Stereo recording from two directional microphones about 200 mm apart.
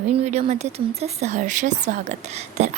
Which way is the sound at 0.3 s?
35° right (ahead or behind).